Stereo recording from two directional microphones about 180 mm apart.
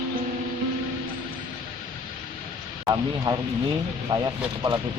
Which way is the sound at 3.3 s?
25° right (ahead or behind).